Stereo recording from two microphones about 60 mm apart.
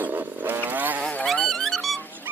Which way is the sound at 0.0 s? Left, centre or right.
Right.